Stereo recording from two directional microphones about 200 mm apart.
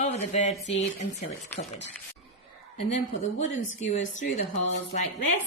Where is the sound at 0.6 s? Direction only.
65° left (ahead or behind).